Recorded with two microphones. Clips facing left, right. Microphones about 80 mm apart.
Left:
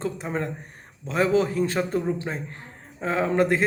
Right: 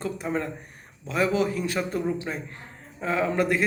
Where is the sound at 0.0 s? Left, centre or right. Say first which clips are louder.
Even; left.